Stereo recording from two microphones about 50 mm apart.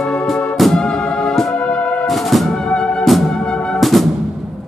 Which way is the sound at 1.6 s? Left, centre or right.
Left.